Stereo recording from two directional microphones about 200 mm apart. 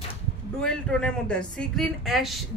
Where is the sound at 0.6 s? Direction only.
5° left (ahead or behind).